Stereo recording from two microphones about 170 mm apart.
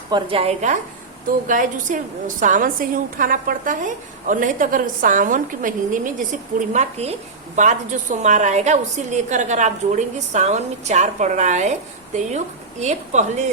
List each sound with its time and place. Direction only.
0.1 s a woman's voice: 35° right (ahead or behind)
1.5 s a woman's voice: 50° right (ahead or behind)
6.7 s a woman's voice: 40° right (ahead or behind)